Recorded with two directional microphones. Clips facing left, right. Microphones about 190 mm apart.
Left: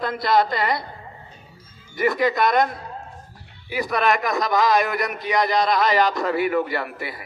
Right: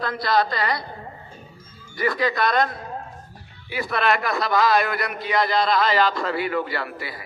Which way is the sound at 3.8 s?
15° left (ahead or behind).